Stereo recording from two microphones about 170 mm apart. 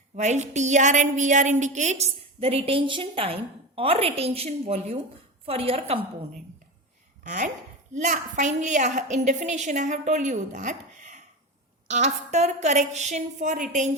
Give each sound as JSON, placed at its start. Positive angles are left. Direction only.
{"t": 0.2, "sound": "a woman's voice", "side_deg": -45}
{"t": 7.3, "sound": "a woman's voice", "side_deg": -50}